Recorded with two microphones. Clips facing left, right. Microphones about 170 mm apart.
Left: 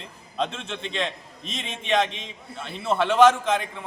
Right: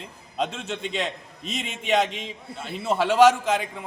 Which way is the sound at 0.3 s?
10° right (ahead or behind).